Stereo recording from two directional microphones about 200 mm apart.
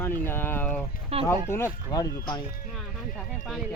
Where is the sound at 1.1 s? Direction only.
30° right (ahead or behind).